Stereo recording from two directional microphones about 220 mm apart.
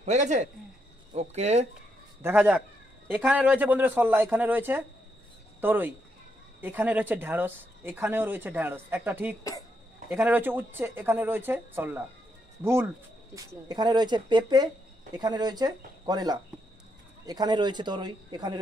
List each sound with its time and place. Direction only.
0.0 s speech: 30° right (ahead or behind)
2.2 s speech: 5° right (ahead or behind)
9.4 s a sound: 15° left (ahead or behind)
10.0 s speech: 10° right (ahead or behind)